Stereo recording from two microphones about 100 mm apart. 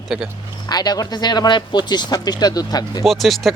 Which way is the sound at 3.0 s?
Centre (ahead or behind).